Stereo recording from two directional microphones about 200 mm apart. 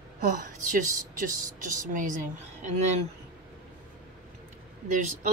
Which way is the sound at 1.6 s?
40° right (ahead or behind).